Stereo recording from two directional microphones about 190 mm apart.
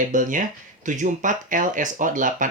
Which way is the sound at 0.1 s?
45° right (ahead or behind).